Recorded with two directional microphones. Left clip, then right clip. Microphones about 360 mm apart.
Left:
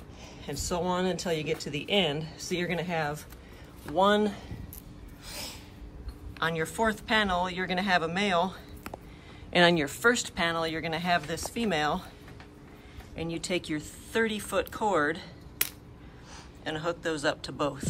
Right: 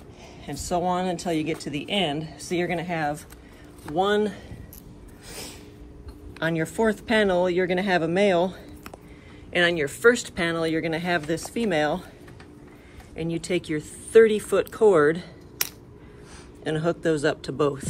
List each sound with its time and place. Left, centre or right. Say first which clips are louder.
0.5 s speech: right 5 dB; centre
6.4 s speech: right 4 dB; centre
13.1 s speech: right 5 dB; centre
15.6 s a sound: right 4 dB; centre
16.6 s speech: right 7 dB; centre